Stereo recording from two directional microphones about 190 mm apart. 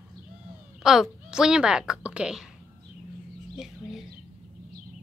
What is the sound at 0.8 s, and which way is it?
A woman's voice, 5° right (ahead or behind).